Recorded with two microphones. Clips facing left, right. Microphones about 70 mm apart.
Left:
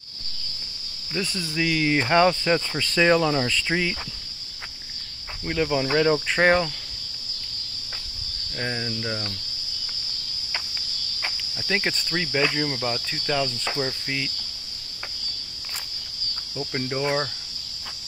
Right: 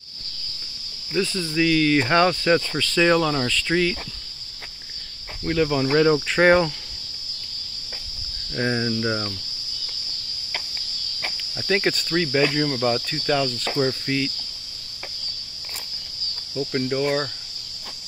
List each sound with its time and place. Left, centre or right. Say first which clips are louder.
1.1 s speech: right 5 dB; centre
5.4 s speech: right 3 dB; centre
8.5 s speech: right 6 dB; centre
11.5 s speech: right 5 dB; centre
16.5 s speech: right 5 dB; centre